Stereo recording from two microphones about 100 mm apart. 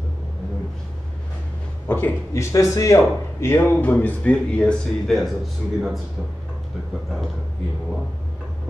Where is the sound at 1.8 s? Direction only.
20° left (ahead or behind).